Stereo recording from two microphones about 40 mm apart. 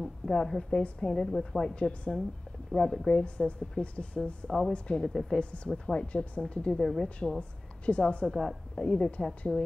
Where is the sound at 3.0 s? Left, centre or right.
Left.